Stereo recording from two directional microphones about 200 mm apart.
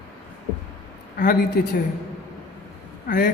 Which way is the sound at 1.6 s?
50° left (ahead or behind).